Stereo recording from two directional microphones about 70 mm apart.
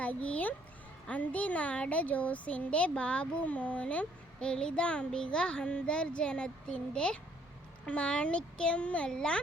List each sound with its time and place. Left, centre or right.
0.0 s a child's voice: centre